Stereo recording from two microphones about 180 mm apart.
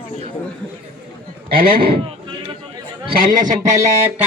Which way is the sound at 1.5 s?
55° right (ahead or behind).